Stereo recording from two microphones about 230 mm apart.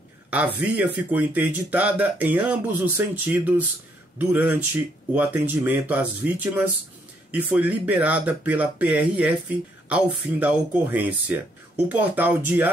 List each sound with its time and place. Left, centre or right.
0.3 s speech: centre